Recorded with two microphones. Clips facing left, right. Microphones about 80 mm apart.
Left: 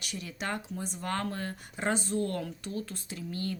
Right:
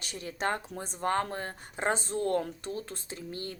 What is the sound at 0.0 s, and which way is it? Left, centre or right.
Speech, right.